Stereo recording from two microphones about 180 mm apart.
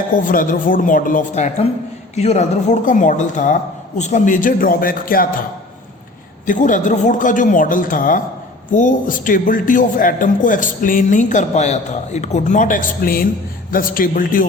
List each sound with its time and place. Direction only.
0.2 s a man's voice: 50° left (ahead or behind)
6.4 s a man's voice: 45° left (ahead or behind)